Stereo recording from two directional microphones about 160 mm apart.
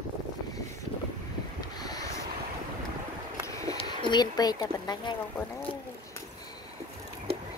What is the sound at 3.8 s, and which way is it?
Speech, 30° left (ahead or behind).